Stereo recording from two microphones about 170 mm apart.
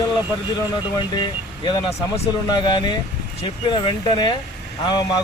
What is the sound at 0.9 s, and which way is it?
Speech, 25° left (ahead or behind).